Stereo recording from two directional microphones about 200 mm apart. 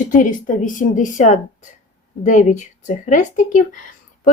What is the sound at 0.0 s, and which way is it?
A woman's voice, 40° left (ahead or behind).